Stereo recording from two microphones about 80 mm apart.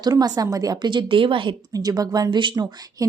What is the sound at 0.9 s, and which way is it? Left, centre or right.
Speech, right.